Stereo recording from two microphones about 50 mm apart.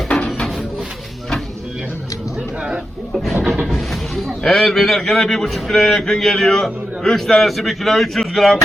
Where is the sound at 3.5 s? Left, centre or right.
Centre.